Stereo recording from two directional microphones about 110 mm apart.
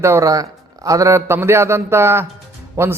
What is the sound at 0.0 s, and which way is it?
A man's voice, 25° right (ahead or behind).